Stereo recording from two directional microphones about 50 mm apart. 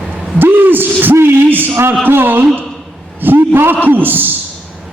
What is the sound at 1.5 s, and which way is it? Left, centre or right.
A man's voice, right.